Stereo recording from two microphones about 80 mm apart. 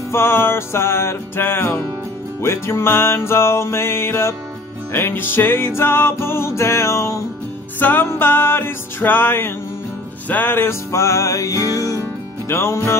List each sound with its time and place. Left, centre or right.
0.1 s music: left
7.8 s music: left
12.4 s music: left